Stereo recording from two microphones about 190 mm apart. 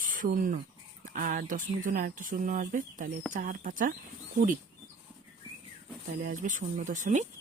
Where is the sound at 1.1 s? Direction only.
45° right (ahead or behind).